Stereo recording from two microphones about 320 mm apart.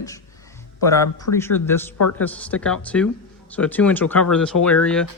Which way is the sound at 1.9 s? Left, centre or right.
Left.